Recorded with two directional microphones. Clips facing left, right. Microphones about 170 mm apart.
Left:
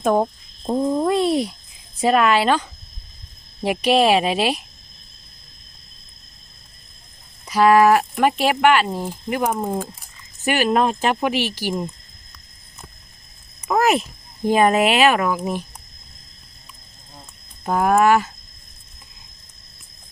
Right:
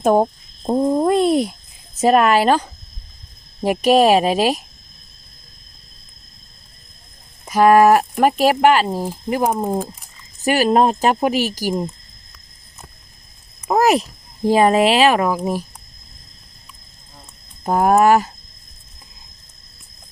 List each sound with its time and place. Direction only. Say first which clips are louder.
0.0 s a woman's voice: right 3 dB; 40° right (ahead or behind)
7.4 s speech: right 2 dB; 50° right (ahead or behind); by 9.9 s 25° right (ahead or behind)
10.4 s speech: right 3 dB; 35° right (ahead or behind)
13.7 s speech: right 3 dB; 35° right (ahead or behind)
17.6 s speech: right 3 dB; 40° right (ahead or behind)